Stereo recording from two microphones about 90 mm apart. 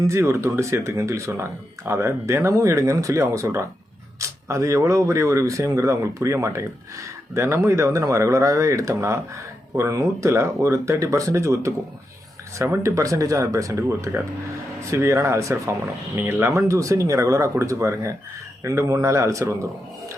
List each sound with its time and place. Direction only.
0.0 s speech: 30° right (ahead or behind)